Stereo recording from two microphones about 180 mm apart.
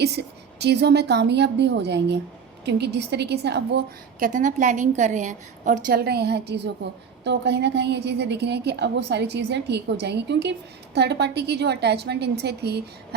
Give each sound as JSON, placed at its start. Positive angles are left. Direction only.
{"t": 0.0, "sound": "a woman's voice", "side_deg": -65}
{"t": 4.3, "sound": "a woman's voice", "side_deg": -45}